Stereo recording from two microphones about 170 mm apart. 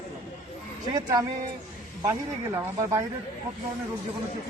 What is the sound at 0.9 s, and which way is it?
Speech, 20° right (ahead or behind).